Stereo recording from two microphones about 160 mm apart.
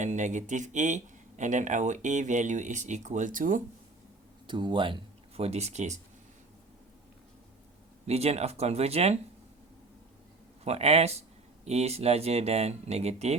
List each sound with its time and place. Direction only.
0.0 s speech: 50° right (ahead or behind)
4.4 s speech: 30° right (ahead or behind); by 6.0 s 45° right (ahead or behind)
8.0 s speech: 40° right (ahead or behind)
10.6 s speech: 40° right (ahead or behind)